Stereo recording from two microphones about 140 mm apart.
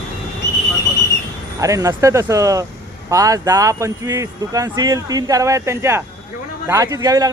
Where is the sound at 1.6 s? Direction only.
25° right (ahead or behind).